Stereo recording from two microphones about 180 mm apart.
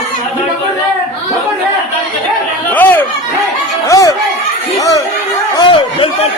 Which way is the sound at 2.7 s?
10° left (ahead or behind).